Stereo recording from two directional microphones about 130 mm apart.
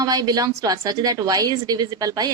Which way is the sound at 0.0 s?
30° right (ahead or behind).